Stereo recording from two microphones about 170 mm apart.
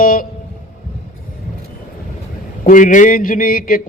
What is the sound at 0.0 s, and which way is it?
Speech, 55° left (ahead or behind).